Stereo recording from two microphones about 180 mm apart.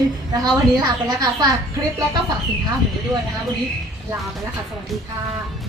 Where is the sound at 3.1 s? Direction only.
20° right (ahead or behind).